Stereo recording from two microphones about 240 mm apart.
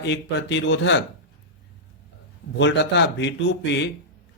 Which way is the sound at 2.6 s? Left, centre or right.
Left.